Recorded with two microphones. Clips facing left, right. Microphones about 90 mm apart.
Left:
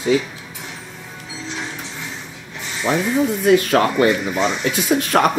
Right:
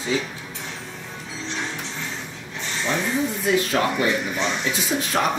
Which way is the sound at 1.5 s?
5° left (ahead or behind).